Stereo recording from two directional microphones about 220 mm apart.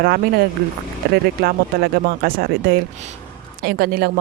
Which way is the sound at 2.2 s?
45° right (ahead or behind).